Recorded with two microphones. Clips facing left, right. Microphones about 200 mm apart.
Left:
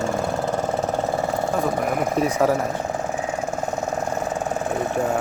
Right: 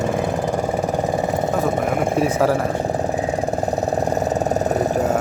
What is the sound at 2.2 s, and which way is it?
Speech, centre (ahead or behind).